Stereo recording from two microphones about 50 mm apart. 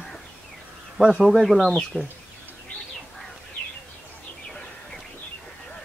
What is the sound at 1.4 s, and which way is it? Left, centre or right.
Speech, centre.